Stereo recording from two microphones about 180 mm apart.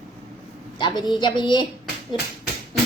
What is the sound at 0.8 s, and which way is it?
Speech, 25° left (ahead or behind).